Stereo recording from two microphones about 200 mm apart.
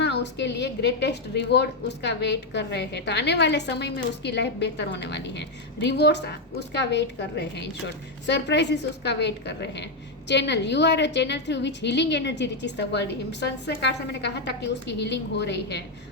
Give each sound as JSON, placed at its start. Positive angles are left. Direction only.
{"t": 0.0, "sound": "a woman's voice", "side_deg": 60}